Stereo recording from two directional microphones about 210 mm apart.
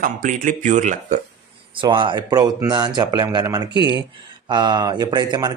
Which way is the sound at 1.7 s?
20° right (ahead or behind).